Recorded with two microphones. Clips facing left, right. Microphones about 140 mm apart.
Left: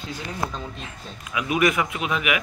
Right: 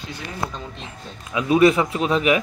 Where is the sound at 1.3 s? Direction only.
30° right (ahead or behind).